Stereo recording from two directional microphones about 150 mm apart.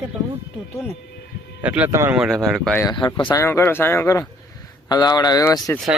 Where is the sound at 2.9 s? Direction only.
30° left (ahead or behind).